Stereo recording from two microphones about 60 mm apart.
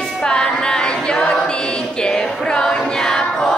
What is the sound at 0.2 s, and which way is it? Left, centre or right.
Chant, centre.